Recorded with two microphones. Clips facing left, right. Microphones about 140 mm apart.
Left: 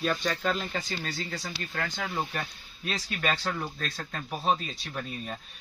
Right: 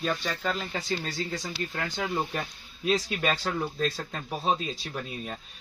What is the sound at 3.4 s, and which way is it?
Speech, 10° right (ahead or behind).